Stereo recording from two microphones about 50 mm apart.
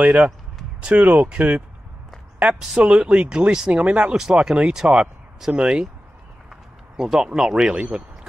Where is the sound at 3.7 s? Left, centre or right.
Right.